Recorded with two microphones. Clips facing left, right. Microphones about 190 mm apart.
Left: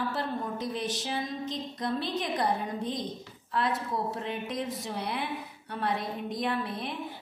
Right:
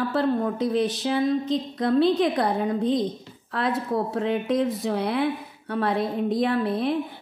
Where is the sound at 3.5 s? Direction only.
60° right (ahead or behind).